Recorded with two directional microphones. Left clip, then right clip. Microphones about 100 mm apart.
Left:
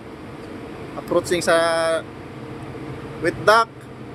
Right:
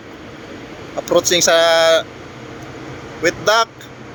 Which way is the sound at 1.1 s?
20° right (ahead or behind).